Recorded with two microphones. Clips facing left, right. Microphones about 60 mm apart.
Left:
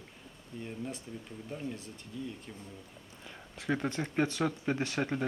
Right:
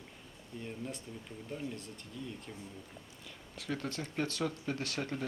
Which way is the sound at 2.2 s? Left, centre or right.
Centre.